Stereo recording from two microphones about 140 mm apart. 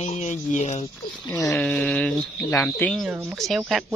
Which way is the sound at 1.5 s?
10° left (ahead or behind).